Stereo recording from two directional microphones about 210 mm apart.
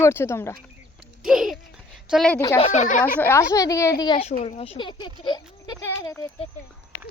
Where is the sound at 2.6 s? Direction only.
30° left (ahead or behind).